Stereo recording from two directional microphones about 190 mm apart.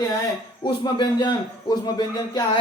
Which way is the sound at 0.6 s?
25° left (ahead or behind).